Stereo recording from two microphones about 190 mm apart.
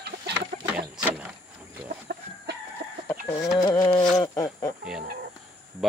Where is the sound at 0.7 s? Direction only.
5° right (ahead or behind).